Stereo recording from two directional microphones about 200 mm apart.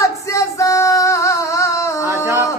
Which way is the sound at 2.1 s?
10° right (ahead or behind).